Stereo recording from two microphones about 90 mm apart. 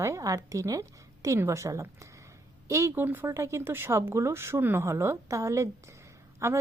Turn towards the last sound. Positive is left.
turn(degrees=-30)  # may be behind; listen again after turning